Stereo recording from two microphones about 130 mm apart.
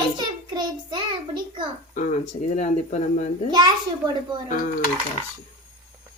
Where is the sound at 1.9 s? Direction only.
65° left (ahead or behind).